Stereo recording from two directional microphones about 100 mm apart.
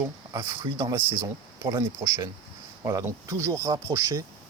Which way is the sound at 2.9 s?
30° right (ahead or behind).